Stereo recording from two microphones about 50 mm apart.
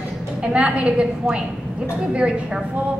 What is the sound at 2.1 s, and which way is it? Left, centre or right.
Speech, right.